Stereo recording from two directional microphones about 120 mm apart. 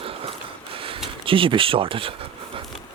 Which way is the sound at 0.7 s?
50° right (ahead or behind).